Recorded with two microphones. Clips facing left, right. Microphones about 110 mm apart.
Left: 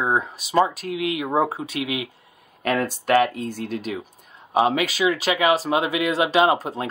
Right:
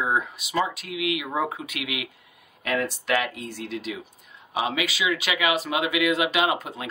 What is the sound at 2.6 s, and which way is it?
Speech, 45° left (ahead or behind).